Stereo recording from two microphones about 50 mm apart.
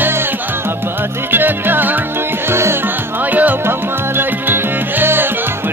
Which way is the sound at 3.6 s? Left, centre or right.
Right.